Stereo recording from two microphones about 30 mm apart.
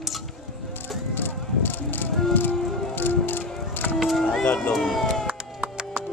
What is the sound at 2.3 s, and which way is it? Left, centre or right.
Music, left.